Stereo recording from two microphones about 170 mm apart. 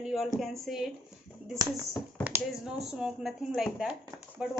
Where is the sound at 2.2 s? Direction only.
5° right (ahead or behind).